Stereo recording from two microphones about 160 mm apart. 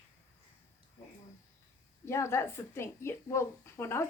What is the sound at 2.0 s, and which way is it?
A woman's voice, 15° left (ahead or behind).